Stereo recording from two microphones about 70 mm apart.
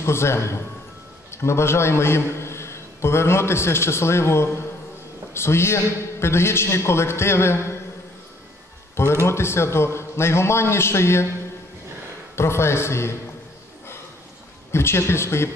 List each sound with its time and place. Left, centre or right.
0.0 s a man's voice: left
8.9 s a man's voice: left
12.4 s a man's voice: left
14.7 s a man's voice: left